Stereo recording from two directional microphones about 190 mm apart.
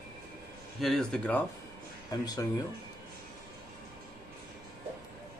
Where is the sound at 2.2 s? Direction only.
20° left (ahead or behind).